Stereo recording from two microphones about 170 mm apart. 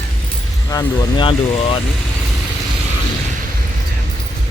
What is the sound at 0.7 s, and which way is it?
Speech, 25° left (ahead or behind).